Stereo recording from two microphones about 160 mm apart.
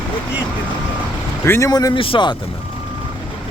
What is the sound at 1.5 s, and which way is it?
Speech, 20° left (ahead or behind).